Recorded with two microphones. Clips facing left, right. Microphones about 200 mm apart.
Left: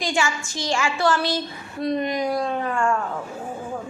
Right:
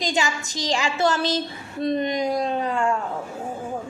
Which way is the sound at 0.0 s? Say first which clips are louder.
Even; 20° right (ahead or behind).